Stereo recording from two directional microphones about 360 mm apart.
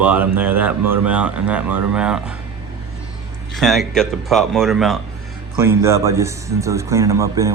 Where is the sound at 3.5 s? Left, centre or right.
Centre.